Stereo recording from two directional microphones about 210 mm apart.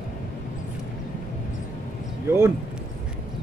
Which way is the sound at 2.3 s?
10° right (ahead or behind).